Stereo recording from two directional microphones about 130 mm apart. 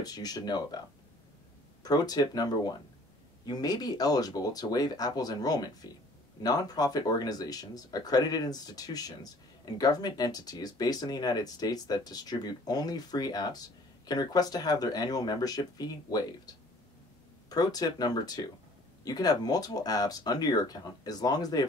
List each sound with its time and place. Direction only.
0.0 s speech: 30° left (ahead or behind)
1.8 s speech: 30° left (ahead or behind)